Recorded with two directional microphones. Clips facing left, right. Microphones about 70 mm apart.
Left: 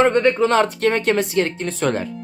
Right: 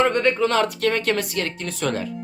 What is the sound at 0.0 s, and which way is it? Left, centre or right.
Speech, left.